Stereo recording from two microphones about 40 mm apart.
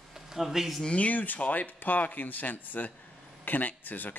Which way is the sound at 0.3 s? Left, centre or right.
Centre.